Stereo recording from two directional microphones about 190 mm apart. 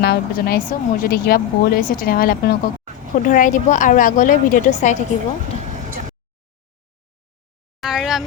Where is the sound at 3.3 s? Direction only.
40° left (ahead or behind).